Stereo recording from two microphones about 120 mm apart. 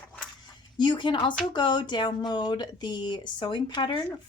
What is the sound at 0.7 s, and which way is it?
A woman's voice, 40° left (ahead or behind).